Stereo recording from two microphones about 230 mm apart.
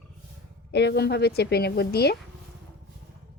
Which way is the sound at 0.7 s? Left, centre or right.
Left.